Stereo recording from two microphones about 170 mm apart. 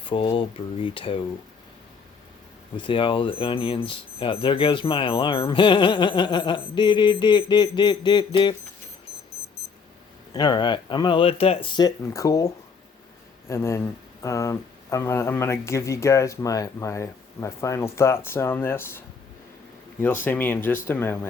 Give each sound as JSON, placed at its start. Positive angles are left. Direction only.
{"t": 0.0, "sound": "speech", "side_deg": 30}
{"t": 2.7, "sound": "speech", "side_deg": 30}
{"t": 10.3, "sound": "speech", "side_deg": 25}